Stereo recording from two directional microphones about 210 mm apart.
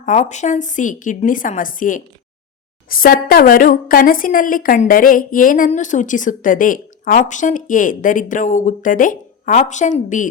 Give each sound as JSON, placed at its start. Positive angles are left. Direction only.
{"t": 0.0, "sound": "a woman's voice", "side_deg": 35}